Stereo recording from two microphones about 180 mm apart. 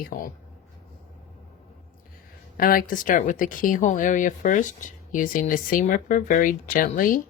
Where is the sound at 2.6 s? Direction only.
50° left (ahead or behind).